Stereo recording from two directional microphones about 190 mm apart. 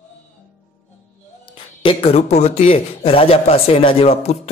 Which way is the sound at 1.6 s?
30° left (ahead or behind).